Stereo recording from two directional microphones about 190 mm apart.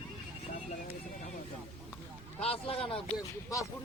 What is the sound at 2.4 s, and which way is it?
Speech, 30° left (ahead or behind).